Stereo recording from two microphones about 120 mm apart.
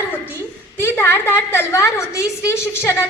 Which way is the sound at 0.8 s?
20° left (ahead or behind).